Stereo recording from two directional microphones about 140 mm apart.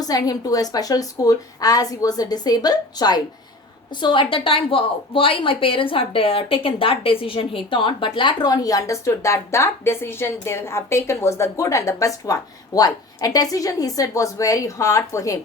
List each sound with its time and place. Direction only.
0.0 s a woman's voice: 25° left (ahead or behind)